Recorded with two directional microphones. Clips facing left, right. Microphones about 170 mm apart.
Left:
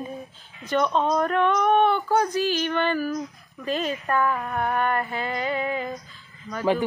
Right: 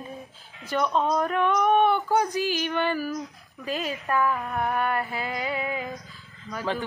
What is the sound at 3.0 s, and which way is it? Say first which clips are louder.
Speech: left 3 dB; centre (ahead or behind).